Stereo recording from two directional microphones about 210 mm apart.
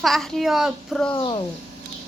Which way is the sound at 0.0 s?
Centre (ahead or behind).